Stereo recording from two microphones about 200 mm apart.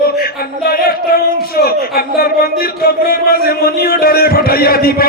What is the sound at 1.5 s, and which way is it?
Speech, 50° left (ahead or behind).